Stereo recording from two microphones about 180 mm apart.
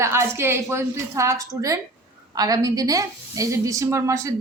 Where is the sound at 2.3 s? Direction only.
20° right (ahead or behind).